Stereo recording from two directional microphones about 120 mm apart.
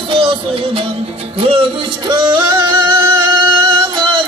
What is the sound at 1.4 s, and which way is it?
Music, 50° right (ahead or behind).